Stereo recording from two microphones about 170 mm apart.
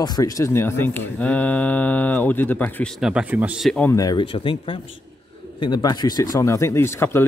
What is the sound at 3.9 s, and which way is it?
A man's voice, 20° left (ahead or behind).